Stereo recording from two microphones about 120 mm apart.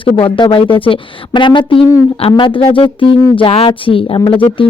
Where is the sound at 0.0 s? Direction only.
45° left (ahead or behind).